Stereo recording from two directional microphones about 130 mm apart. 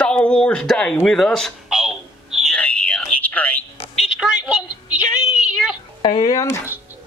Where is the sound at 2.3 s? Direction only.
Centre (ahead or behind).